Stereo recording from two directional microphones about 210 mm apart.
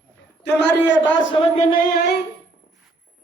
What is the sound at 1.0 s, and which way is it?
Speech, 60° left (ahead or behind).